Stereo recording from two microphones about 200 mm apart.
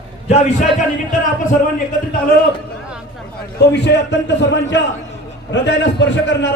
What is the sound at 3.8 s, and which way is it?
Speech, 60° left (ahead or behind).